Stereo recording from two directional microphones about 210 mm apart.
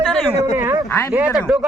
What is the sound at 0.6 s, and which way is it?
Speech, 10° right (ahead or behind).